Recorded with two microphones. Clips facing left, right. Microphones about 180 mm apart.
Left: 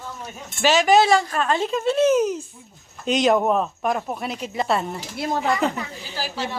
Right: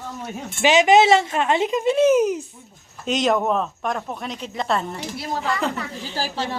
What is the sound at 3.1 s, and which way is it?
A woman's voice, centre (ahead or behind).